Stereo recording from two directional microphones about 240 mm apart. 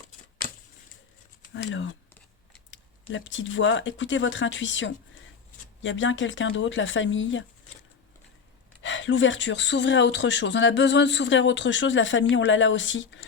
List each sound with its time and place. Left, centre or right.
1.5 s speech: left
8.8 s speech: left